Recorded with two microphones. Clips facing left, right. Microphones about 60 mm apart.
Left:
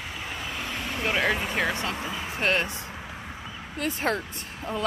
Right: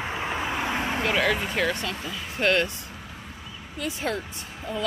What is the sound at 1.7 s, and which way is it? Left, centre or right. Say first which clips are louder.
Speech: even; left.